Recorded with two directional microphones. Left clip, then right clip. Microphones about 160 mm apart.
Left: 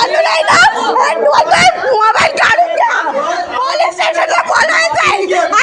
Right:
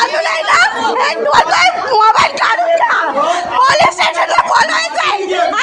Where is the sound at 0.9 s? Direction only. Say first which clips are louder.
Left 2 dB; 25° right (ahead or behind).